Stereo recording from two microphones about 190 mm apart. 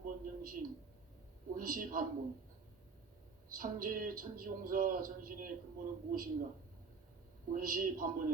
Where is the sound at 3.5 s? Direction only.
45° right (ahead or behind).